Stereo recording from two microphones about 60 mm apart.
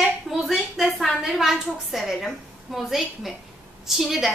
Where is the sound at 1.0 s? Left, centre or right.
Centre.